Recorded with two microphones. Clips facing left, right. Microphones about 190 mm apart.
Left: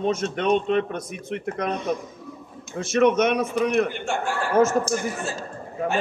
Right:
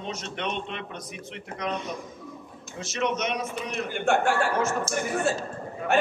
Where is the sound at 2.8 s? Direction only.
55° left (ahead or behind).